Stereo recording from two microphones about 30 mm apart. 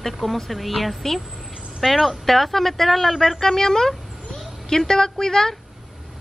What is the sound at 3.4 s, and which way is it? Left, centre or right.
Speech, centre.